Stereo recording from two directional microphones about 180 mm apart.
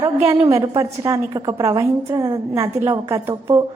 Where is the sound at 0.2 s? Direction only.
15° right (ahead or behind).